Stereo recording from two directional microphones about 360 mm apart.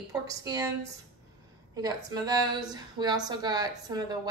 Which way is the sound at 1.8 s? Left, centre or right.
Centre.